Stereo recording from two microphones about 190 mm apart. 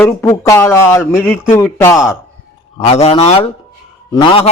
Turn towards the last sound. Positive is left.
turn(degrees=20)  # may be behind; listen again after turning